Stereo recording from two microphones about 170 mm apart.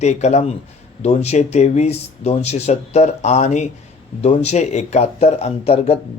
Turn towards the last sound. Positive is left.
turn(degrees=35)  # may be behind; listen again after turning